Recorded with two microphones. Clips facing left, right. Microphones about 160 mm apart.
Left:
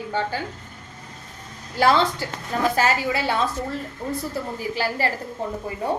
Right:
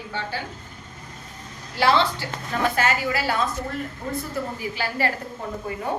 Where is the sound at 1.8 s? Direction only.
45° left (ahead or behind).